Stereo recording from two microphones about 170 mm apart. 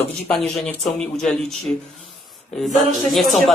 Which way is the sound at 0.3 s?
Centre (ahead or behind).